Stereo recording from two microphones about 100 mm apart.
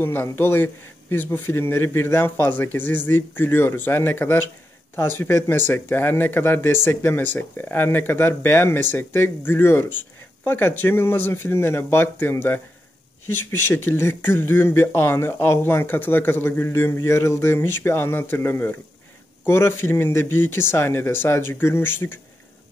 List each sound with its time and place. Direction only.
0.0 s speech: 20° left (ahead or behind)